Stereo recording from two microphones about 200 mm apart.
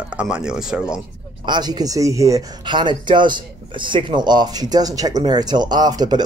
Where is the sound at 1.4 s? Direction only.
20° right (ahead or behind).